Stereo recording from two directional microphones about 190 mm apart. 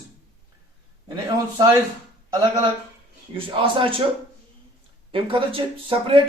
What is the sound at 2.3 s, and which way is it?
Speech, 15° right (ahead or behind).